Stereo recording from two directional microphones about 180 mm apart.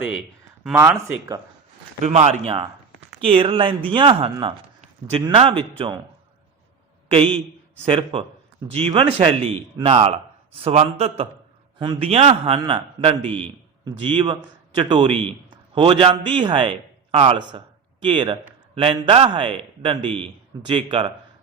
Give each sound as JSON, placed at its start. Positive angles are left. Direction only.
{"t": 0.8, "sound": "speech", "side_deg": -15}
{"t": 2.0, "sound": "a man's voice", "side_deg": -40}
{"t": 7.1, "sound": "a man's voice", "side_deg": -30}